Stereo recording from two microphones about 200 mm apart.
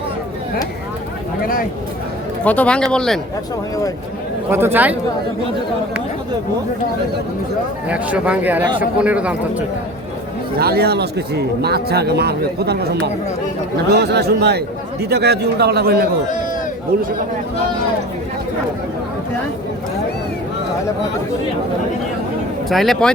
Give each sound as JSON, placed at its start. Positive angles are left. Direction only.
{"t": 2.4, "sound": "speech", "side_deg": 5}
{"t": 4.5, "sound": "a man's voice", "side_deg": -10}
{"t": 7.9, "sound": "a man's voice", "side_deg": -5}
{"t": 10.6, "sound": "speech", "side_deg": -50}
{"t": 13.9, "sound": "speech", "side_deg": -55}
{"t": 22.7, "sound": "speech", "side_deg": 0}